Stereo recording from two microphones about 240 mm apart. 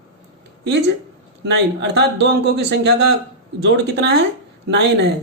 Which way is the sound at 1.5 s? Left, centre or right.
Right.